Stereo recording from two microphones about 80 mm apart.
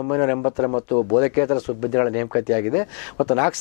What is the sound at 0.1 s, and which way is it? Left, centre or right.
Speech, left.